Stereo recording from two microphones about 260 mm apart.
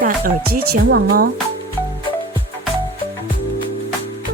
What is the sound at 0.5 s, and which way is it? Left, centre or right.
Speech, right.